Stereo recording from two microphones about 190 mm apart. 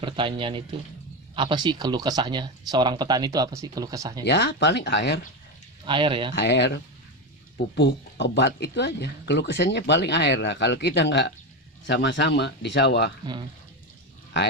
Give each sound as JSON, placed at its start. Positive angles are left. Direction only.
{"t": 0.0, "sound": "speech", "side_deg": -25}
{"t": 4.2, "sound": "speech", "side_deg": 65}
{"t": 5.8, "sound": "speech", "side_deg": -25}
{"t": 6.3, "sound": "speech", "side_deg": 65}